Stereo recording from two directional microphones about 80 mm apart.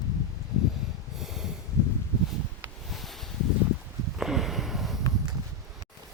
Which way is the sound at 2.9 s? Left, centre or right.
Centre.